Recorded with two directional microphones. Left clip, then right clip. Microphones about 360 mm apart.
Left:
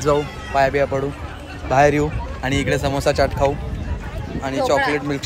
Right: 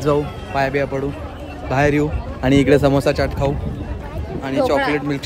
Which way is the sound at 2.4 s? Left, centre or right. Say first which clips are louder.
Right 7 dB; centre.